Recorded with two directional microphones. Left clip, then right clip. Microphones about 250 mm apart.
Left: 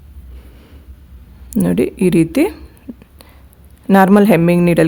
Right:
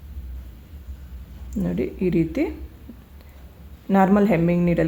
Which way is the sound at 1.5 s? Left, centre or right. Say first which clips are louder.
Left 10 dB; left.